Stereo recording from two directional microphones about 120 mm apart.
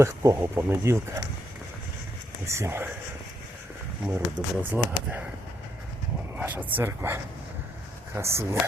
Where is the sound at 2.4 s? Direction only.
25° right (ahead or behind).